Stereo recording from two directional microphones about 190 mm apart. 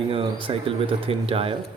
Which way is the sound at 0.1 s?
30° right (ahead or behind).